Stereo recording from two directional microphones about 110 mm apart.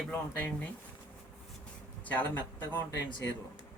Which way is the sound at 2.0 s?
15° left (ahead or behind).